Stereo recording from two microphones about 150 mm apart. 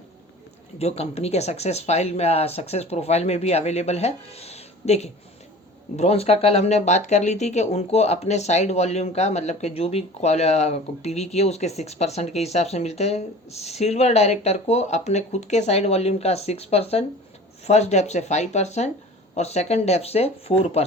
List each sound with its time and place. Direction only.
0.8 s speech: 45° left (ahead or behind)